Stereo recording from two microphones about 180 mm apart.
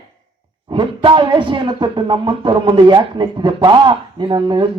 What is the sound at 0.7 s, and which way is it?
Speech, 25° right (ahead or behind).